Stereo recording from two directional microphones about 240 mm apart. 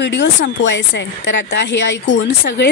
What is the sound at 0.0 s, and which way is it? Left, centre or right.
Speech, left.